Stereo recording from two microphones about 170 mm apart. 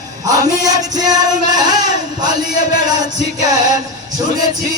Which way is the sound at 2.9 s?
25° right (ahead or behind).